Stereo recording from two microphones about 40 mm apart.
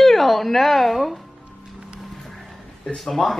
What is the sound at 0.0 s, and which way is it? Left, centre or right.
Speech, centre.